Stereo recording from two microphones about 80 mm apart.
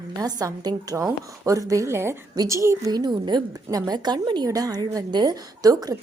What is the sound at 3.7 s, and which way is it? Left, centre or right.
A woman's voice, right.